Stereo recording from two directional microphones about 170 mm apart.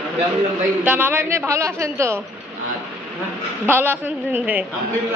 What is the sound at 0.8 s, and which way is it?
A woman's voice, 10° right (ahead or behind).